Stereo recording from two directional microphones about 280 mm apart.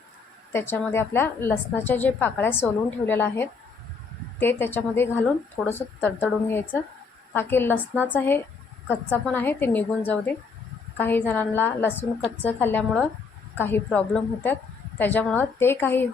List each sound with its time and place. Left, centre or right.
0.5 s a woman's voice: centre